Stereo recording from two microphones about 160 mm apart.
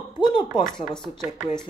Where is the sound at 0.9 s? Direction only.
5° left (ahead or behind).